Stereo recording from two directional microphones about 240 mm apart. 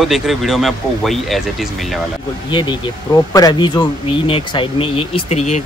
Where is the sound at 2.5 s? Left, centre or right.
Centre.